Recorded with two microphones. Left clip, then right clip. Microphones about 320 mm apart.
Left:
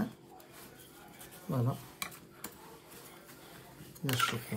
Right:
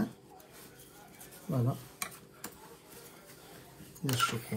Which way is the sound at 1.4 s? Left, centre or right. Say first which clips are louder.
Right 1 dB; centre.